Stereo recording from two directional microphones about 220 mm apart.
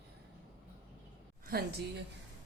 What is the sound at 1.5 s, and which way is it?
Speech, 40° right (ahead or behind).